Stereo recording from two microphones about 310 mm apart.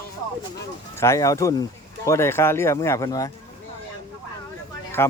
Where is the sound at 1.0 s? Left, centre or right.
Centre.